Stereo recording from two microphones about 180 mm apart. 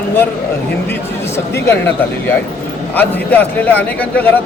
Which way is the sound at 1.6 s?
10° left (ahead or behind).